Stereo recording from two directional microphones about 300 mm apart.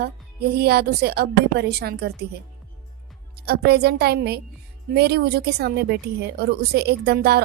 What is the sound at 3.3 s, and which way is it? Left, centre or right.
A woman's voice, right.